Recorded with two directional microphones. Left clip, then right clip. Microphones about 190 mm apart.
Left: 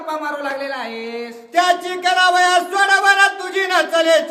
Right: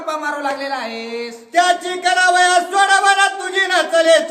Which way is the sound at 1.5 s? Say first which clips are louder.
Right 1 dB; 20° left (ahead or behind).